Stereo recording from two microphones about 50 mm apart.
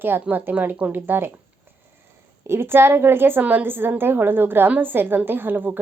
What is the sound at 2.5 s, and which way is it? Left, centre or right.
A woman's voice, right.